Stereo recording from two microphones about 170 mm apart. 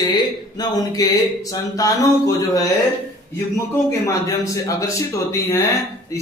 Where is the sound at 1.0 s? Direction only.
20° left (ahead or behind).